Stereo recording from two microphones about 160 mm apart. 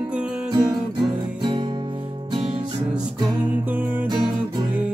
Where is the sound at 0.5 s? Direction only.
25° right (ahead or behind).